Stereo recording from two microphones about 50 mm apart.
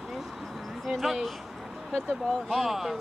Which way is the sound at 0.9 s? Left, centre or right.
Centre.